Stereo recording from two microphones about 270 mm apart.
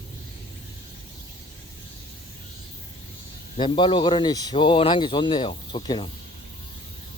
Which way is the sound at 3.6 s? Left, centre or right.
Centre.